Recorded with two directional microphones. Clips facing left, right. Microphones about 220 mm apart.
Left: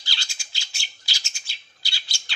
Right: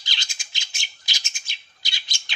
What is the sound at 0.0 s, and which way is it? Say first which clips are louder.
Bird: even; 20° right (ahead or behind).